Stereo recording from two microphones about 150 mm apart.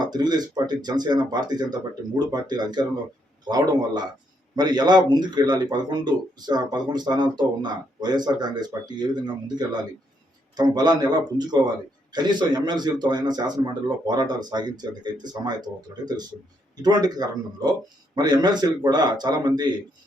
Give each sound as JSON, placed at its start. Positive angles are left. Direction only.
{"t": 0.0, "sound": "speech", "side_deg": -30}